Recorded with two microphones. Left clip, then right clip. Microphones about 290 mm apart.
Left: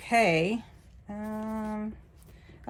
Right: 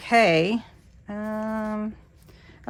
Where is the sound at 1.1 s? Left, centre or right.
Right.